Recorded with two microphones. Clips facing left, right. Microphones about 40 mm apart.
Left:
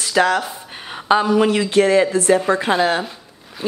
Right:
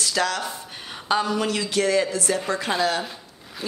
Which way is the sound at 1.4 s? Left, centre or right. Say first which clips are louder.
Left 8 dB; left.